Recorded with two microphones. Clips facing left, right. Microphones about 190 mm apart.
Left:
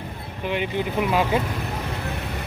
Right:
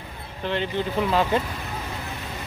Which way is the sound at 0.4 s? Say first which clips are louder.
Left 1 dB; 10° left (ahead or behind).